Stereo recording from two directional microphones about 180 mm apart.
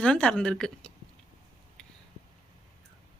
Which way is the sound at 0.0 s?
5° left (ahead or behind).